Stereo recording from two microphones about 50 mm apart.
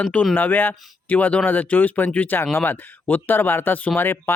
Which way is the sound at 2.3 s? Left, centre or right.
Left.